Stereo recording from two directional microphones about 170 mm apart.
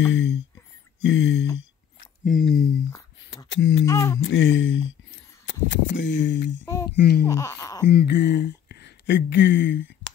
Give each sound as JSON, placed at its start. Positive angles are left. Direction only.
{"t": 0.0, "sound": "speech", "side_deg": 90}
{"t": 2.2, "sound": "speech", "side_deg": 55}
{"t": 3.5, "sound": "speech", "side_deg": 90}
{"t": 3.8, "sound": "a sound", "side_deg": 20}
{"t": 4.2, "sound": "speech", "side_deg": 90}
{"t": 6.6, "sound": "speech", "side_deg": 20}
{"t": 7.0, "sound": "speech", "side_deg": 70}
{"t": 7.2, "sound": "speech", "side_deg": 20}
{"t": 7.9, "sound": "speech", "side_deg": 80}